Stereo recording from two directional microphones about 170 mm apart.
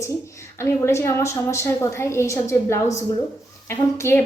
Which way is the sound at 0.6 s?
15° left (ahead or behind).